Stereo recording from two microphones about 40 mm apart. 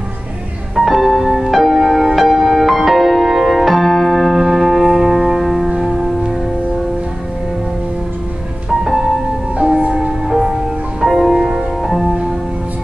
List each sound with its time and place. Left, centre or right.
0.7 s music: centre
8.6 s music: centre
11.3 s music: centre
11.8 s music: centre